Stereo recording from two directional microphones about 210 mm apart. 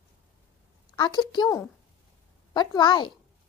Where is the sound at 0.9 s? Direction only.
20° left (ahead or behind).